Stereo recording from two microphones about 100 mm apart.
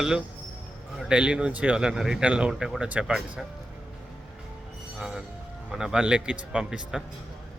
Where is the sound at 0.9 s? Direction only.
10° right (ahead or behind).